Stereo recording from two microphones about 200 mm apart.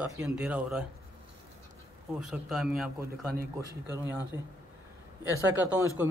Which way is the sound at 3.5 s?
15° right (ahead or behind).